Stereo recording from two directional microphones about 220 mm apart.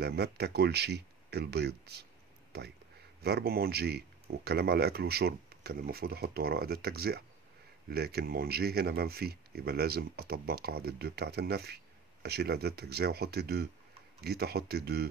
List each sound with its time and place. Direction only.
0.0 s speech: 45° right (ahead or behind)
3.2 s speech: 45° right (ahead or behind)